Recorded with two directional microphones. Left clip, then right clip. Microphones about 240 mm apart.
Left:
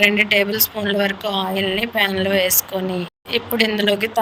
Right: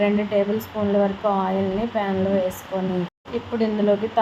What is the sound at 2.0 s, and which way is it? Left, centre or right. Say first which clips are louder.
Speech: left 5 dB; left.